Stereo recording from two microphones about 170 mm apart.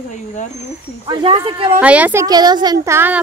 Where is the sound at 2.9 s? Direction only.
10° right (ahead or behind).